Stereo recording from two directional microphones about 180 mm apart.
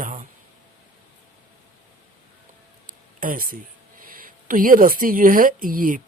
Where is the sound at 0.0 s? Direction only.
45° right (ahead or behind).